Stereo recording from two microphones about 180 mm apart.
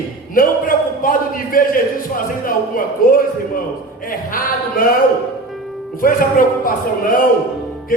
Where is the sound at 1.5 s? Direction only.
50° left (ahead or behind).